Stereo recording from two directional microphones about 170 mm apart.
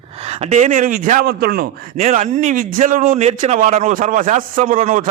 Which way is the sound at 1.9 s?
45° right (ahead or behind).